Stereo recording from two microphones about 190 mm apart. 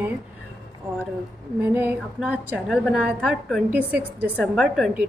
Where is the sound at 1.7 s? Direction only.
10° right (ahead or behind).